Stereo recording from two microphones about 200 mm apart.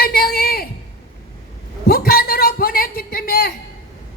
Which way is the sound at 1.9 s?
50° left (ahead or behind).